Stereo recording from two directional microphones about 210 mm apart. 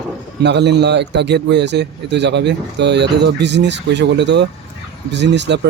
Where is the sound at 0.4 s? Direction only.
55° right (ahead or behind).